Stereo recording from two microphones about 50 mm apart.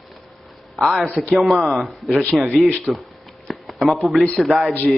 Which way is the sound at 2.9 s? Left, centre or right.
Centre.